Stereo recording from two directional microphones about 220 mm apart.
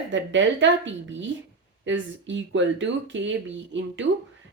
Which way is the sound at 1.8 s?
55° right (ahead or behind).